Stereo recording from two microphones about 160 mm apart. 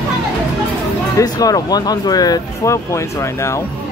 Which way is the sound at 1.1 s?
20° left (ahead or behind).